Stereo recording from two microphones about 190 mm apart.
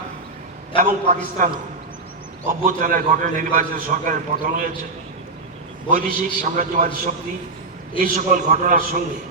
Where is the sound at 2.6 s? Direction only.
45° right (ahead or behind).